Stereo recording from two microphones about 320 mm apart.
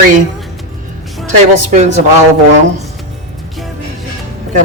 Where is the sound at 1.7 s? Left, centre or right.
Right.